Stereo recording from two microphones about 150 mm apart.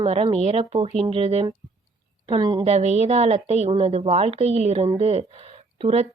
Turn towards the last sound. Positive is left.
turn(degrees=-40)  # may be behind; listen again after turning